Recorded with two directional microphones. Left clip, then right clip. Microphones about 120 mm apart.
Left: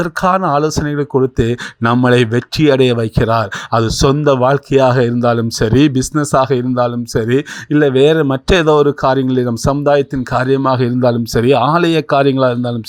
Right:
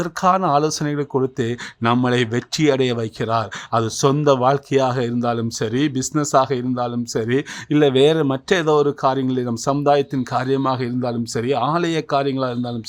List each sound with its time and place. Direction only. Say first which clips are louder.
0.0 s speech: left 4 dB; 25° left (ahead or behind); by 6.0 s 40° left (ahead or behind)
6.0 s speech: left 4 dB; 30° left (ahead or behind)
8.4 s speech: left 6 dB; 35° left (ahead or behind)